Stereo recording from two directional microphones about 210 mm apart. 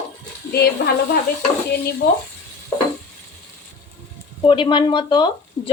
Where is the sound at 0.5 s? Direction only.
50° left (ahead or behind).